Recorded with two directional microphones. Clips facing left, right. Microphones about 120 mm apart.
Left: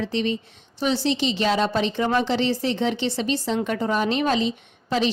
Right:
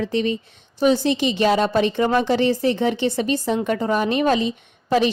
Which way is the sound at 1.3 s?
55° right (ahead or behind).